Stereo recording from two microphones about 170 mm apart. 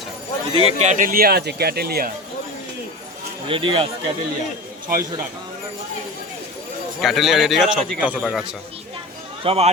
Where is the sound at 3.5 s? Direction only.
30° right (ahead or behind).